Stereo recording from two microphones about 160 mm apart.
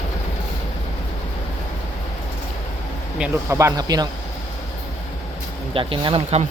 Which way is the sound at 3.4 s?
20° right (ahead or behind).